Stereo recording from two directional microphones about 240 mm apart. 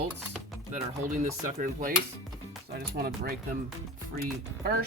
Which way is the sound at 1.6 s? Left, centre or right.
Right.